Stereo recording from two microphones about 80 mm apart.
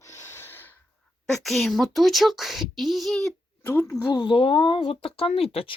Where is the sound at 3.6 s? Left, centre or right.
Left.